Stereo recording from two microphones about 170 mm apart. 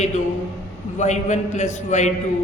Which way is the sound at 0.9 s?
45° left (ahead or behind).